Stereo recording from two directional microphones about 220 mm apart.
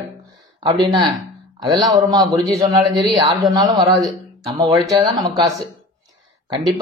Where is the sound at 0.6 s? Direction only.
25° right (ahead or behind).